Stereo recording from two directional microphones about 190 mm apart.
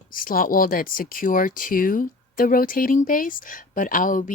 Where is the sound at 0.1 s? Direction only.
50° left (ahead or behind).